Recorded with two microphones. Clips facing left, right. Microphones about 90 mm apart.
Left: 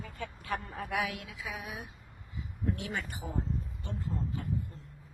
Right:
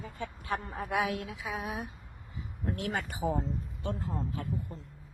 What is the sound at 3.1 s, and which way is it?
Speech, 85° right.